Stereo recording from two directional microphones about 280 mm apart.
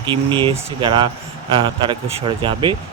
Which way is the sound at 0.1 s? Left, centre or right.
Centre.